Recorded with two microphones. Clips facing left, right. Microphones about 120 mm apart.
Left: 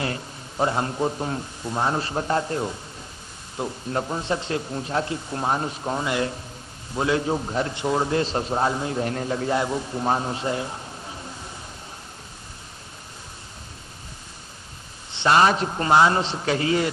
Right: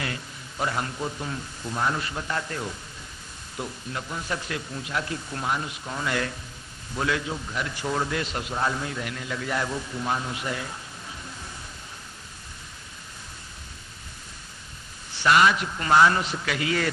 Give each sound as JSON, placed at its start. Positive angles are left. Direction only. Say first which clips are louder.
{"t": 0.6, "sound": "a man's voice", "louder": "left 6 dB", "side_deg": 30}
{"t": 3.9, "sound": "a man's voice", "louder": "left 9 dB", "side_deg": 40}
{"t": 4.2, "sound": "a man's voice", "louder": "left 6 dB", "side_deg": 25}
{"t": 6.1, "sound": "a man's voice", "louder": "left 3 dB", "side_deg": 20}
{"t": 7.3, "sound": "a man's voice", "louder": "left 7 dB", "side_deg": 40}
{"t": 7.7, "sound": "a man's voice", "louder": "left 3 dB", "side_deg": 25}
{"t": 15.1, "sound": "a man's voice", "louder": "left 2 dB", "side_deg": 25}
{"t": 15.9, "sound": "a man's voice", "louder": "left 1 dB", "side_deg": 25}